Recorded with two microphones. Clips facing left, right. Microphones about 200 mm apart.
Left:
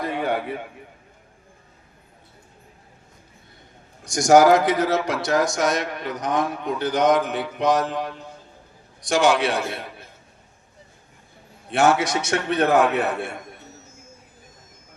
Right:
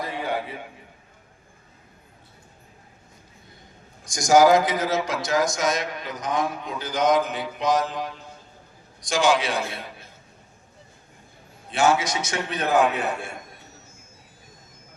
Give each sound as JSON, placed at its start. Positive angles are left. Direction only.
{"t": 0.0, "sound": "a sound", "side_deg": 60}
{"t": 4.0, "sound": "speech", "side_deg": 65}
{"t": 11.7, "sound": "speech", "side_deg": 65}